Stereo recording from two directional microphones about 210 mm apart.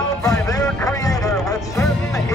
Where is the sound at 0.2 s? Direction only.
15° left (ahead or behind).